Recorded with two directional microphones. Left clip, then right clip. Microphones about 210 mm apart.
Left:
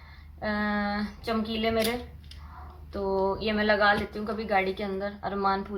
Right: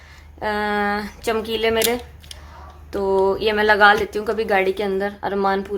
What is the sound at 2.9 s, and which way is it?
Speech, 55° right (ahead or behind).